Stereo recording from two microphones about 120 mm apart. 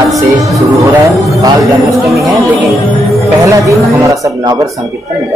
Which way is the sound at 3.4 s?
25° right (ahead or behind).